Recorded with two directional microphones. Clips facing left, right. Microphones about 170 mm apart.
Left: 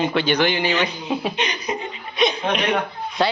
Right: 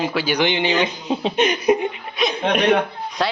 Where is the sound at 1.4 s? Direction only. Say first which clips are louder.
Right 9 dB; 55° right (ahead or behind).